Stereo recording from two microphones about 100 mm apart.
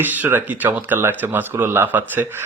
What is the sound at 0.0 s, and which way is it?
Speech, 20° right (ahead or behind).